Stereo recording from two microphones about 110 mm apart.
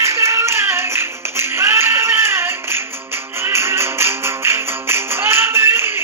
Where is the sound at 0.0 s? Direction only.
25° right (ahead or behind).